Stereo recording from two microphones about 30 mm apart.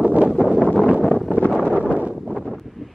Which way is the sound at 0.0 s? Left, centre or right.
Right.